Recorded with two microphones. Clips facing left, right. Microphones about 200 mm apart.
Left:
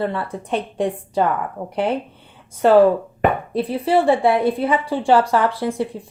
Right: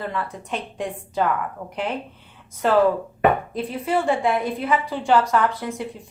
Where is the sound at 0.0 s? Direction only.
30° left (ahead or behind).